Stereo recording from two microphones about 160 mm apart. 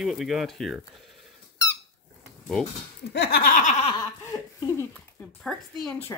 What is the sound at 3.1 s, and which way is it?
Speech, 85° left.